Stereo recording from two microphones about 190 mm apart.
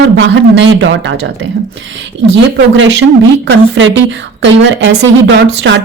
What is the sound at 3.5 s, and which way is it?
A woman's voice, 70° right (ahead or behind).